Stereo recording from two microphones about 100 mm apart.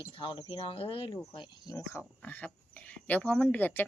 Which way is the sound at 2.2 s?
15° left (ahead or behind).